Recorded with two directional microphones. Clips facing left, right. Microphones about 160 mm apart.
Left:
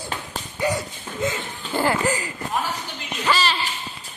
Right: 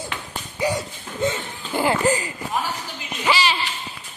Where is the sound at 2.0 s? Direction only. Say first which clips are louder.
Right 3 dB; 25° right (ahead or behind).